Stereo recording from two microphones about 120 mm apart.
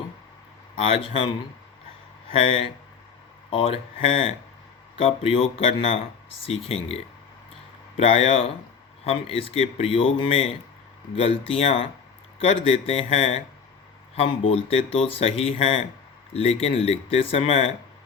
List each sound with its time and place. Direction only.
0.8 s speech: 50° left (ahead or behind)
2.3 s speech: 50° left (ahead or behind)
7.9 s speech: 60° left (ahead or behind)